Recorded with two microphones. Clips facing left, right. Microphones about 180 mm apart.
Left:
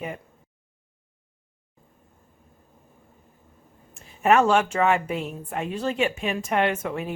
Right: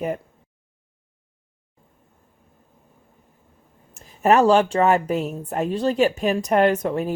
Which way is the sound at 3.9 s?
40° right (ahead or behind).